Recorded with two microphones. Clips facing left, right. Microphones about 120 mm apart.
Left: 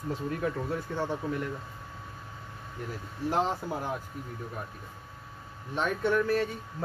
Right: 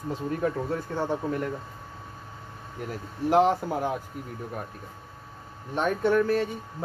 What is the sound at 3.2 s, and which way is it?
Speech, 65° right (ahead or behind).